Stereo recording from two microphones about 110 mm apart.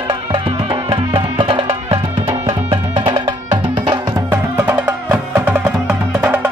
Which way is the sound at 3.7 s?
45° right (ahead or behind).